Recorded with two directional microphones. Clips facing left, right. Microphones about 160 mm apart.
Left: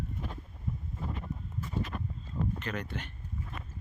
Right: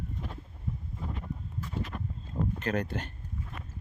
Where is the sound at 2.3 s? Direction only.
40° right (ahead or behind).